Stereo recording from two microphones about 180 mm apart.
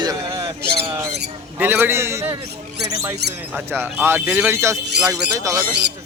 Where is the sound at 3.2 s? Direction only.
65° right (ahead or behind).